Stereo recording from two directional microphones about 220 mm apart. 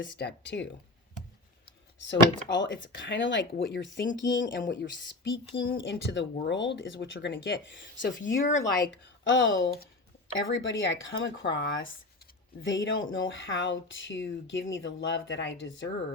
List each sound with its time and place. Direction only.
0.0 s speech: 50° left (ahead or behind)
2.0 s speech: 55° left (ahead or behind)